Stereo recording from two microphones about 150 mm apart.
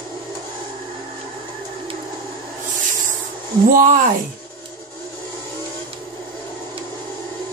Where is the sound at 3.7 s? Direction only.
65° right (ahead or behind).